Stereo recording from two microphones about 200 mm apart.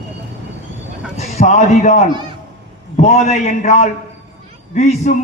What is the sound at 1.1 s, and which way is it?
A man's voice, 35° left (ahead or behind).